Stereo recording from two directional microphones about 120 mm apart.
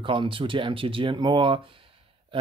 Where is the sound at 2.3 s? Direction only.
45° right (ahead or behind).